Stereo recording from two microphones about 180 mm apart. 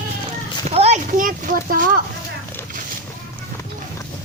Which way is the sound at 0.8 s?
40° right (ahead or behind).